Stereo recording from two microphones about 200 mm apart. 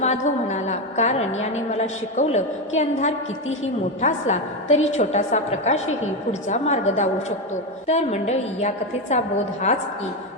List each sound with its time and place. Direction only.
0.0 s a woman's voice: 35° left (ahead or behind)